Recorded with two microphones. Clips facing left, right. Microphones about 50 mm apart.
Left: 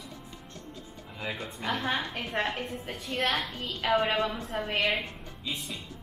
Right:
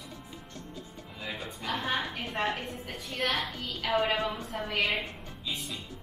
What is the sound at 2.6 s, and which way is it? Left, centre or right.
Speech, centre.